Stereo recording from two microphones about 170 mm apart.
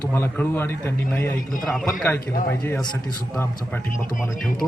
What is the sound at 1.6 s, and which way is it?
Speech, centre (ahead or behind).